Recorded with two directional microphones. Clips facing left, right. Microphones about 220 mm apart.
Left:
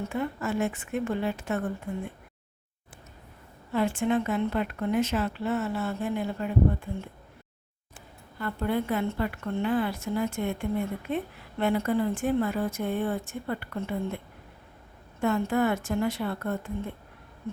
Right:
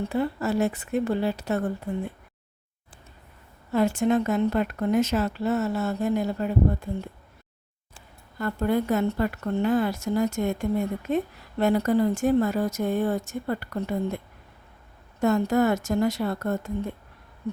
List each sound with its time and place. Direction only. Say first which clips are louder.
0.0 s speech: right 4 dB; 35° right (ahead or behind)
3.7 s speech: right 4 dB; 40° right (ahead or behind)
8.4 s speech: right 4 dB; 45° right (ahead or behind)
15.2 s speech: right 4 dB; 40° right (ahead or behind)